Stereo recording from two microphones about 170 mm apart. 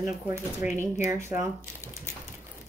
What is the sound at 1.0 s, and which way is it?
Speech, 15° right (ahead or behind).